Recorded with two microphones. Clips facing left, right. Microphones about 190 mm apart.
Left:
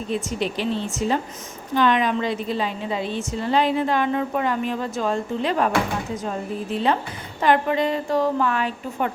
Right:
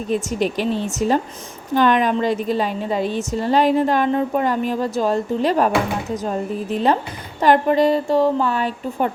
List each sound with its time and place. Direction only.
0.1 s a woman's voice: 45° right (ahead or behind)
7.4 s speech: 40° right (ahead or behind)